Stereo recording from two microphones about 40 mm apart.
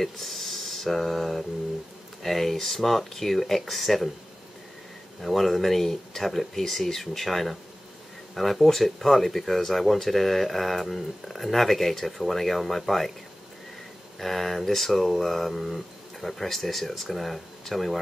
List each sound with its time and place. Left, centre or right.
0.0 s speech: centre
5.2 s speech: centre
14.1 s speech: centre